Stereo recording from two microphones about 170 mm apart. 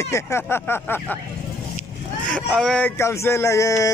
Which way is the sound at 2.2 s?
5° left (ahead or behind).